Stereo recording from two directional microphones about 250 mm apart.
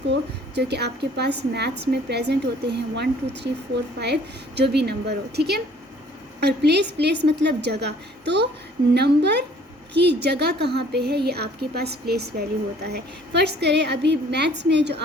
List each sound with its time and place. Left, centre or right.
0.1 s a woman's voice: right